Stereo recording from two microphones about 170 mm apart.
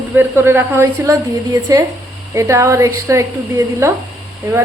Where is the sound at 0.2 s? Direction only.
15° right (ahead or behind).